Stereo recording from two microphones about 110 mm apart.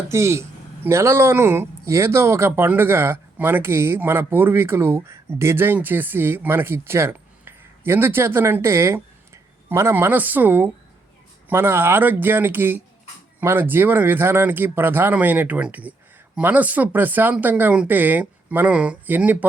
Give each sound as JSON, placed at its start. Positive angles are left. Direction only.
{"t": 0.1, "sound": "speech", "side_deg": -25}